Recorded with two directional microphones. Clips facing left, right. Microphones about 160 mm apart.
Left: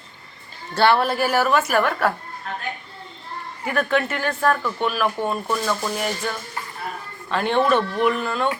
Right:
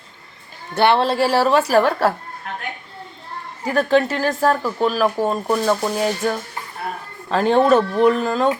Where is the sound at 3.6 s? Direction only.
30° right (ahead or behind).